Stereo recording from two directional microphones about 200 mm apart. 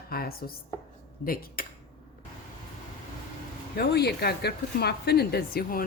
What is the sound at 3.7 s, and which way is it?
Speech, 55° left (ahead or behind).